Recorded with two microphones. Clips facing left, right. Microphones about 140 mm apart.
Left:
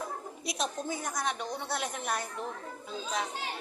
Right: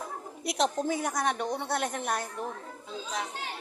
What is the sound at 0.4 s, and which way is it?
A woman's voice, 75° right (ahead or behind).